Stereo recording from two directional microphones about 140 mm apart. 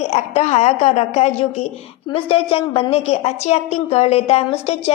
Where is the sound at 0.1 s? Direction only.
55° left (ahead or behind).